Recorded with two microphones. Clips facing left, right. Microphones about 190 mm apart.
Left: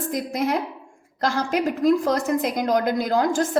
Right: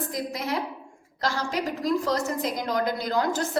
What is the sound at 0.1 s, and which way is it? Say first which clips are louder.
A woman's voice: left 6 dB; 50° left (ahead or behind).